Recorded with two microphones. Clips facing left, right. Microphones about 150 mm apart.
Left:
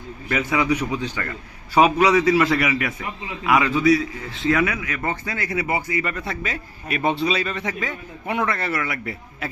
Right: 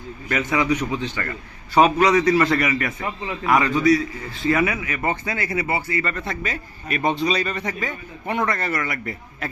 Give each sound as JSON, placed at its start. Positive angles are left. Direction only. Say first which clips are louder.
{"t": 0.3, "sound": "a man's voice", "louder": "even", "side_deg": 5}
{"t": 5.0, "sound": "speech", "louder": "right 3 dB", "side_deg": -20}
{"t": 5.4, "sound": "a man's voice", "louder": "right 1 dB", "side_deg": 0}
{"t": 5.6, "sound": "a man's voice", "louder": "even", "side_deg": 15}